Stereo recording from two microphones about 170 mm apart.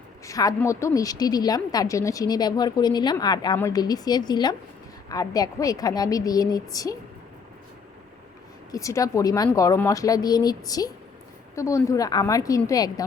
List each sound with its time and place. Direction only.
0.3 s a woman's voice: 20° left (ahead or behind)
8.7 s a woman's voice: 20° left (ahead or behind)